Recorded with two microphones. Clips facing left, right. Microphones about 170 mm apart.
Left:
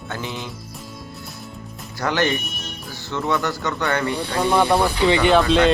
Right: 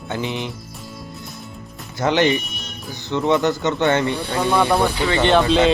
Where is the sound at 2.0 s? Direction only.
20° right (ahead or behind).